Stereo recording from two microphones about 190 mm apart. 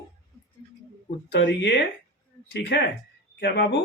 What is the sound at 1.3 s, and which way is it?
Speech, 60° left (ahead or behind).